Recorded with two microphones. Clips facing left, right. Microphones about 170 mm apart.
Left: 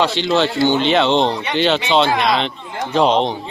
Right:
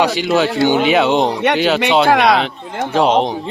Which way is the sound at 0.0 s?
10° right (ahead or behind).